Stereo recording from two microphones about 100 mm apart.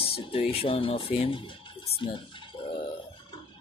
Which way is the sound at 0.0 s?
70° left (ahead or behind).